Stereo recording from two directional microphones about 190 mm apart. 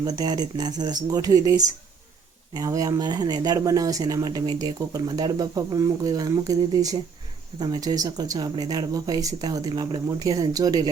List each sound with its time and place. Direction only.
0.0 s speech: 20° right (ahead or behind)